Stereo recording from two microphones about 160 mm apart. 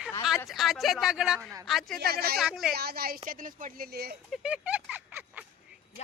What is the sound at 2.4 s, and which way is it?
Speech, 5° right (ahead or behind).